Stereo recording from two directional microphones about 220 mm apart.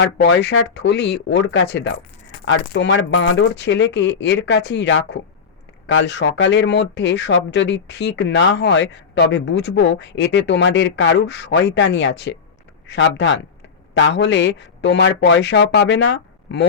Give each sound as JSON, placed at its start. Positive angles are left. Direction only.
{"t": 0.0, "sound": "speech", "side_deg": 50}